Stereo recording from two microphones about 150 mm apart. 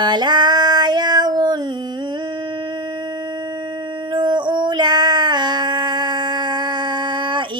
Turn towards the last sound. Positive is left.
turn(degrees=-30)  # may be behind; listen again after turning